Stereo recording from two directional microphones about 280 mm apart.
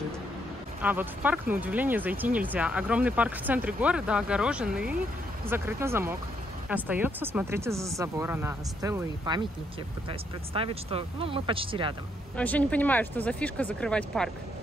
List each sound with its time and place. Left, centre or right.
0.8 s speech: centre
12.4 s speech: centre